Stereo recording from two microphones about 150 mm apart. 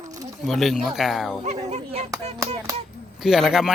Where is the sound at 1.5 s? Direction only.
45° right (ahead or behind).